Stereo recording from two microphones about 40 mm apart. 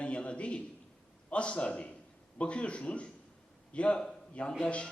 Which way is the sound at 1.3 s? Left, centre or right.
Left.